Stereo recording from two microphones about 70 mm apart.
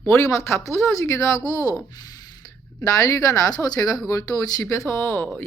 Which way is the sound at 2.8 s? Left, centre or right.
Left.